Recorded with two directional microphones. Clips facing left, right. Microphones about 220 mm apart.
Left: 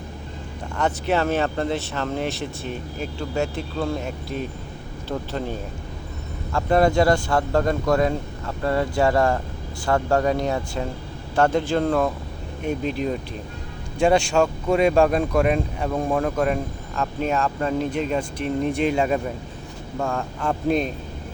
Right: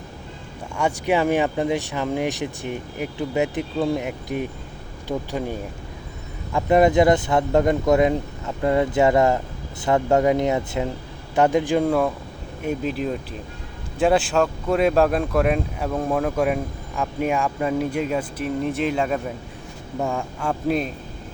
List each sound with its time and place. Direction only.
0.8 s speech: 10° right (ahead or behind)
20.0 s speech: 15° right (ahead or behind)
20.5 s speech: 5° right (ahead or behind)